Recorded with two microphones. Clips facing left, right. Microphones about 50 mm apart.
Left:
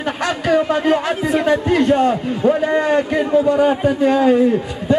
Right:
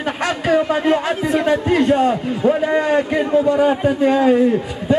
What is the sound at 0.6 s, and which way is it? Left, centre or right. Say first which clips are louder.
A man's voice: left 1 dB; centre.